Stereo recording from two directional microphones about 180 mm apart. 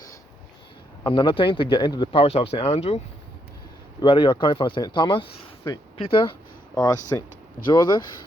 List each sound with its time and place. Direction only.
1.0 s speech: 30° left (ahead or behind)
4.0 s speech: 25° left (ahead or behind)
7.1 s speech: 20° left (ahead or behind)